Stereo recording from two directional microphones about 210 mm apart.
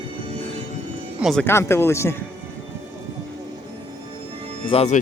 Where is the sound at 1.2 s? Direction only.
5° left (ahead or behind).